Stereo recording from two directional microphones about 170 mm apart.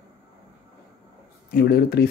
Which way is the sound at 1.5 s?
65° left (ahead or behind).